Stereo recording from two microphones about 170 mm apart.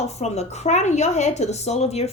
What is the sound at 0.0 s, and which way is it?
A woman's voice, 40° left (ahead or behind).